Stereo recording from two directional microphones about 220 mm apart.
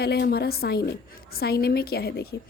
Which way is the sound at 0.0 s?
45° left (ahead or behind).